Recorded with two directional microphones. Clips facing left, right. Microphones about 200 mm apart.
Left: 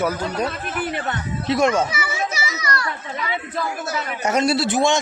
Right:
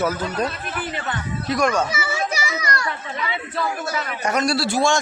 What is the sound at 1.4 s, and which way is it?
Speech, 25° left (ahead or behind).